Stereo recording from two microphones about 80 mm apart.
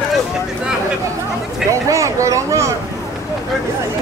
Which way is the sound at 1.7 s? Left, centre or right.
Right.